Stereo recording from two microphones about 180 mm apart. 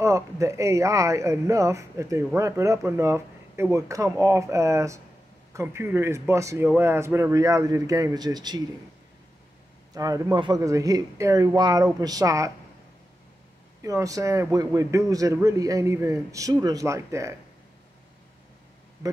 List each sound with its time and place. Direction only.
0.0 s speech: 15° right (ahead or behind)
9.9 s speech: 20° right (ahead or behind)
13.8 s speech: 20° right (ahead or behind)